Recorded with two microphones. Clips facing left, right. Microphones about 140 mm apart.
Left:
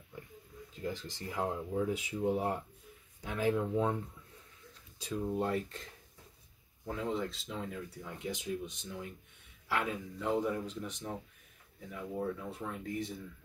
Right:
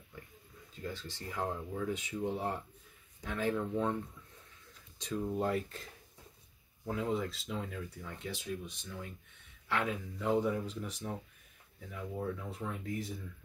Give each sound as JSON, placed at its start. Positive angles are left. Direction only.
{"t": 0.8, "sound": "speech", "side_deg": 15}
{"t": 4.9, "sound": "speech", "side_deg": 5}
{"t": 8.0, "sound": "speech", "side_deg": 15}
{"t": 9.7, "sound": "speech", "side_deg": 5}